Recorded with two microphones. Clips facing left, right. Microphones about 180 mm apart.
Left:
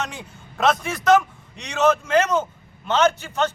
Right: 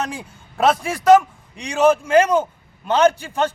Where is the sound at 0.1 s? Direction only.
30° right (ahead or behind).